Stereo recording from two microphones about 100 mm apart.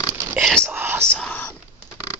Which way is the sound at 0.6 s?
20° right (ahead or behind).